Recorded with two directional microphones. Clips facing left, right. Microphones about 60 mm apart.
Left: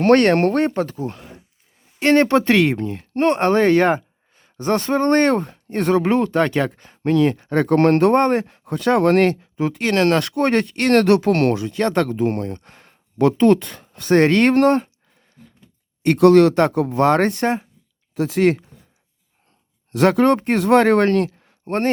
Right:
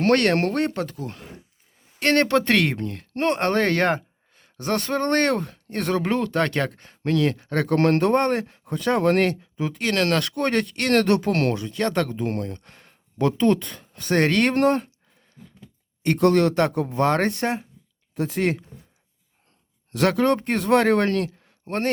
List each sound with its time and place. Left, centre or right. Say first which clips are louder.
0.0 s speech: left 5 dB; left
2.0 s speech: left 5 dB; centre
2.5 s speech: left 5 dB; centre
3.2 s speech: left 5 dB; left
6.3 s speech: left 4 dB; centre
7.3 s speech: left 5 dB; left
8.6 s speech: left 4 dB; left
11.0 s speech: left 5 dB; left
11.7 s speech: left 4 dB; left
14.5 s speech: left 5 dB; left
16.1 s speech: left 7 dB; left
17.1 s speech: left 5 dB; left
18.1 s speech: left 6 dB; left
20.1 s speech: left 5 dB; left